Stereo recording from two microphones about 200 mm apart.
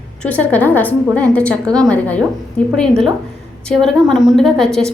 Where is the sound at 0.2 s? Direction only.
5° left (ahead or behind).